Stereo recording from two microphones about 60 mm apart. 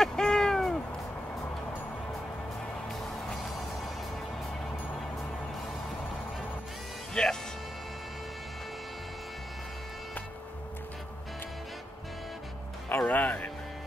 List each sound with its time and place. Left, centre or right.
0.0 s a sound: centre
2.9 s music: centre
7.2 s music: centre
12.9 s music: left